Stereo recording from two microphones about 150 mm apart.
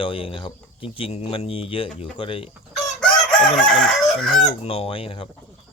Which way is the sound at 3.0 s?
5° left (ahead or behind).